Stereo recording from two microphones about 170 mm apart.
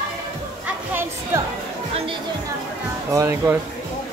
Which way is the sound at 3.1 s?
15° right (ahead or behind).